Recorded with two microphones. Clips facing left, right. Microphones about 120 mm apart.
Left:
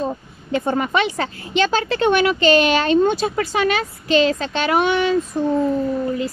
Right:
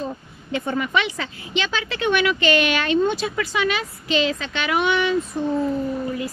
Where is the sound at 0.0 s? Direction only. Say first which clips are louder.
Left 5 dB; 40° left (ahead or behind).